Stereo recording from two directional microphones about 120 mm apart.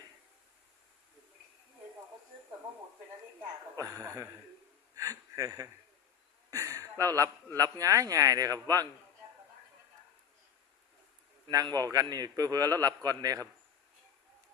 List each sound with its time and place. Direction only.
3.8 s speech: 25° right (ahead or behind)
4.9 s a sound: 25° right (ahead or behind)
7.0 s a man's voice: 30° right (ahead or behind)
11.5 s a man's voice: 30° right (ahead or behind)